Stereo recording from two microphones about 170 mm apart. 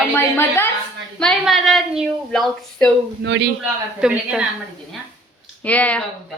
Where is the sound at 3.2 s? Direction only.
90° right.